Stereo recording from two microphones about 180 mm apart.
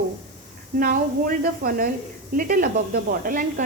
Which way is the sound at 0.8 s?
50° right (ahead or behind).